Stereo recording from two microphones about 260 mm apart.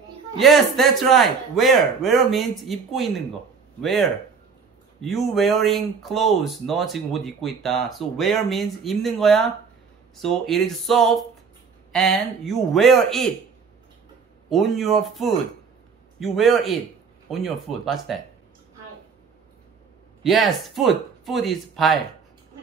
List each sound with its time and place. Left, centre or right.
0.4 s speech: centre
14.5 s speech: centre
20.2 s speech: centre